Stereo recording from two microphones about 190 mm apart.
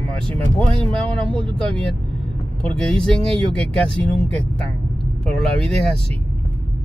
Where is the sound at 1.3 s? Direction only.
25° right (ahead or behind).